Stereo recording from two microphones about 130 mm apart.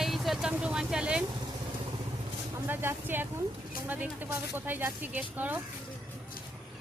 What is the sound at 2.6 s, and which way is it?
Speech, 15° right (ahead or behind).